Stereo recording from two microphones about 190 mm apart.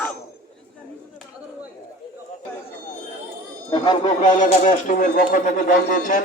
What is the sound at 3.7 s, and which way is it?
Speech, 25° left (ahead or behind).